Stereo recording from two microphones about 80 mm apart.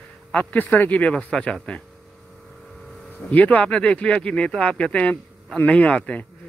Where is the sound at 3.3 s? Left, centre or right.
Centre.